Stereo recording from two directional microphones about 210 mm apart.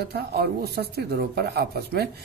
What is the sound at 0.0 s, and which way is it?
Speech, 50° right (ahead or behind).